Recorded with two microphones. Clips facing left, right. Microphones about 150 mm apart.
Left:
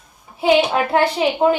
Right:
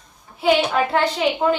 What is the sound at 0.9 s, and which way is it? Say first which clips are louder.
Speech: left 3 dB; 10° left (ahead or behind).